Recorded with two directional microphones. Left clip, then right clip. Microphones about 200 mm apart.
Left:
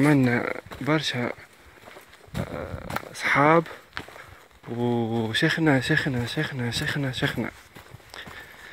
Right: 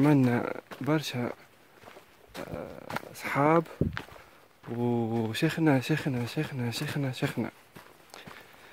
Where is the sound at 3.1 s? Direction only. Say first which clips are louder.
Left 6 dB; 5° right (ahead or behind).